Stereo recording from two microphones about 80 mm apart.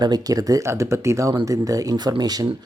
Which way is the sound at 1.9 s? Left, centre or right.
Right.